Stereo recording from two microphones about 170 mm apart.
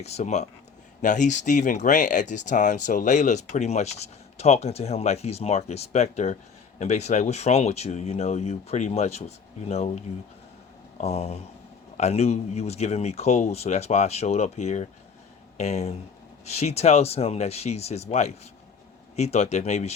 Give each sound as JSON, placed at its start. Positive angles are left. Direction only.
{"t": 0.0, "sound": "speech", "side_deg": 40}